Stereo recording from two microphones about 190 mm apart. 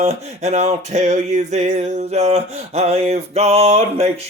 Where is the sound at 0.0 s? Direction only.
35° right (ahead or behind).